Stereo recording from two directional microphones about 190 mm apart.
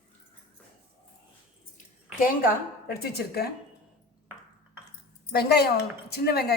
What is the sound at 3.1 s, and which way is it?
Speech, 55° left (ahead or behind).